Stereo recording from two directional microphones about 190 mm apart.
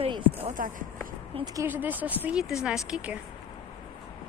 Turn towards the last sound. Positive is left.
turn(degrees=-5)  # may be behind; listen again after turning